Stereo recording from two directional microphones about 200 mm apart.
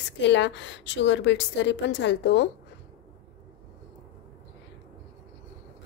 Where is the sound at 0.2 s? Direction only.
60° left (ahead or behind).